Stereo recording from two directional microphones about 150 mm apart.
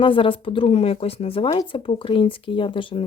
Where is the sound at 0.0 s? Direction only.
35° left (ahead or behind).